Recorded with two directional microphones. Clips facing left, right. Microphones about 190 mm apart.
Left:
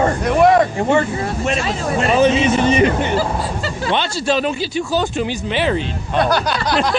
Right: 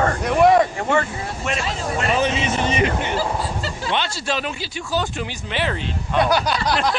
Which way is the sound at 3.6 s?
60° left (ahead or behind).